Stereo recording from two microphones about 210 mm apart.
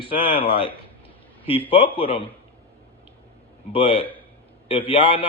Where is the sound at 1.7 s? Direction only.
25° left (ahead or behind).